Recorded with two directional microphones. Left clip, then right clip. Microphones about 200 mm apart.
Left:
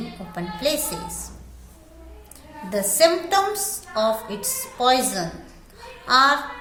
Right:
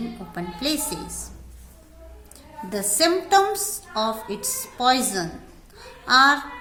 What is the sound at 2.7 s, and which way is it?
A woman's voice, 25° right (ahead or behind).